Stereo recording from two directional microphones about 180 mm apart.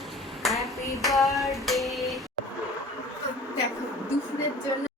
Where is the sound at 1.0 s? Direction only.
Centre (ahead or behind).